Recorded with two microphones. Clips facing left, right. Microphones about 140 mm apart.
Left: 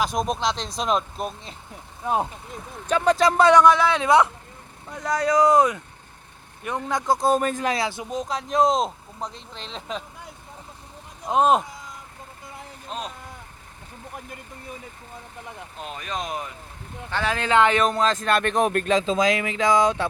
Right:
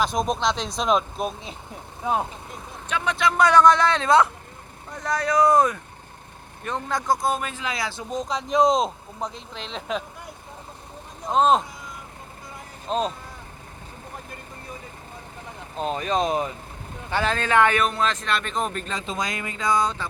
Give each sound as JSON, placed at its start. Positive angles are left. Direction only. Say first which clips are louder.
{"t": 0.0, "sound": "speech", "louder": "right 1 dB", "side_deg": 5}
{"t": 2.9, "sound": "speech", "louder": "left 5 dB", "side_deg": 40}
{"t": 3.5, "sound": "speech", "louder": "left 1 dB", "side_deg": 10}
{"t": 7.1, "sound": "speech", "louder": "left 4 dB", "side_deg": 35}
{"t": 7.8, "sound": "speech", "louder": "left 4 dB", "side_deg": 20}
{"t": 8.1, "sound": "speech", "louder": "right 3 dB", "side_deg": 5}
{"t": 11.3, "sound": "speech", "louder": "even", "side_deg": 10}
{"t": 12.9, "sound": "speech", "louder": "right 8 dB", "side_deg": -30}
{"t": 15.8, "sound": "speech", "louder": "right 8 dB", "side_deg": -35}
{"t": 17.3, "sound": "speech", "louder": "left 2 dB", "side_deg": 20}
{"t": 18.1, "sound": "speech", "louder": "left 5 dB", "side_deg": 45}